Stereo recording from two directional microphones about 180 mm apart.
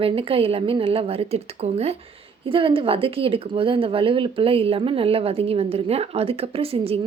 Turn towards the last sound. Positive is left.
turn(degrees=-30)  # may be behind; listen again after turning